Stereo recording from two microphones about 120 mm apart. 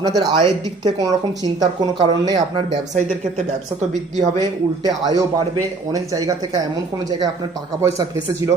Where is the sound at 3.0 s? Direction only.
70° right (ahead or behind).